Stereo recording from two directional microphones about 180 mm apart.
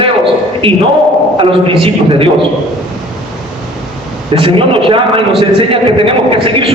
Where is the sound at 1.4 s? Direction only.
30° right (ahead or behind).